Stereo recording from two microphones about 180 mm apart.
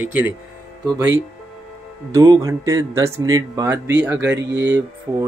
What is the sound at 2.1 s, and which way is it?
Speech, 20° right (ahead or behind).